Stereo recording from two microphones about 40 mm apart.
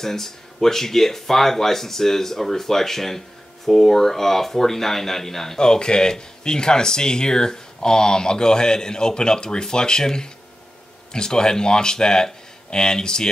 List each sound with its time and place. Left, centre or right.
0.0 s speech: centre